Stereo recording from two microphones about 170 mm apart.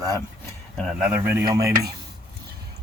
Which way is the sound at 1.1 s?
15° right (ahead or behind).